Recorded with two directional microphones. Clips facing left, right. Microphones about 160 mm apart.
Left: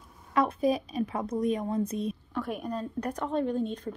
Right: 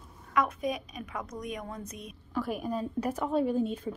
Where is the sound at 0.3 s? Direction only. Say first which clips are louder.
Left 4 dB; 30° left (ahead or behind).